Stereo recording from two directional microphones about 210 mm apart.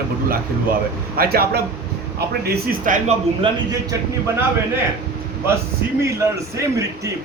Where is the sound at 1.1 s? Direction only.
45° right (ahead or behind).